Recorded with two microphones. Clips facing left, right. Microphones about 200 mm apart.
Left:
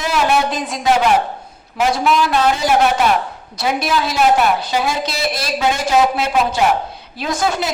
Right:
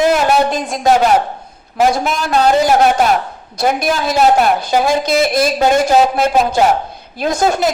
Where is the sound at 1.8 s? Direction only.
45° right (ahead or behind).